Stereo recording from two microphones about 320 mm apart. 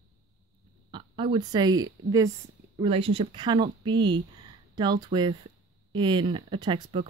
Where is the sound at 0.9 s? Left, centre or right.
Centre.